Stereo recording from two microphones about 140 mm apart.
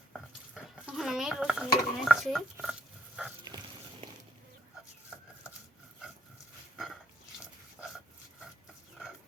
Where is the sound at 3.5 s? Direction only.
30° right (ahead or behind).